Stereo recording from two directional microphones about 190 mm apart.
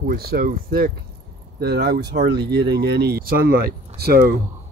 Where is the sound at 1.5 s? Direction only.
60° right (ahead or behind).